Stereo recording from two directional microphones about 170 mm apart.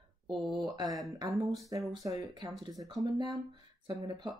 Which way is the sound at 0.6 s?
20° right (ahead or behind).